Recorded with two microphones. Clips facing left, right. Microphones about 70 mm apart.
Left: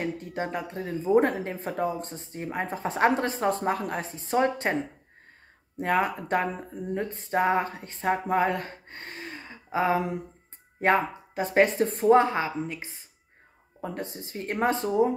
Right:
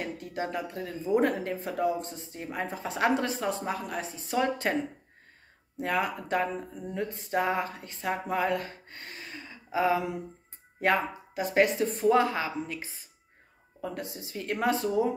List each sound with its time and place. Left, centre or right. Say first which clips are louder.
0.0 s speech: left 3 dB; left
5.8 s speech: left 4 dB; left